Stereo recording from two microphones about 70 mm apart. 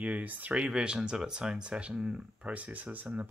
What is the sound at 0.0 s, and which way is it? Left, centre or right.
Speech, right.